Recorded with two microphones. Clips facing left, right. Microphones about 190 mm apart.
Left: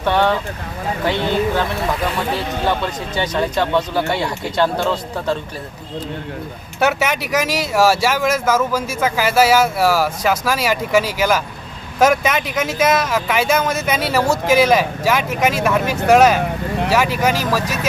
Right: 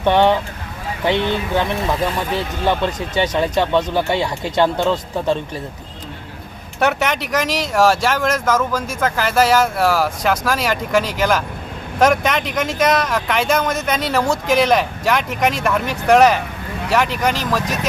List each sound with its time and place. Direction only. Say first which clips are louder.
0.0 s speech: right 3 dB; 20° right (ahead or behind)
3.2 s speech: right 2 dB; 15° right (ahead or behind)
6.7 s speech: even; 5° left (ahead or behind)